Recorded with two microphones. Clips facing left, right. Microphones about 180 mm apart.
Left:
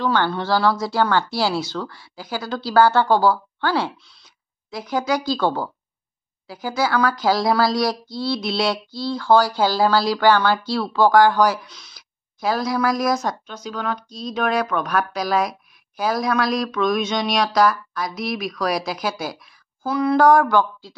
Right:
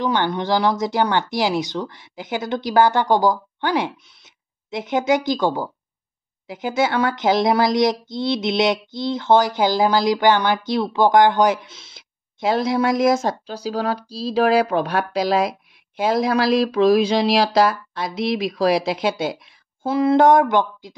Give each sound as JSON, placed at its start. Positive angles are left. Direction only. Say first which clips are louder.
{"t": 0.0, "sound": "speech", "louder": "even", "side_deg": -15}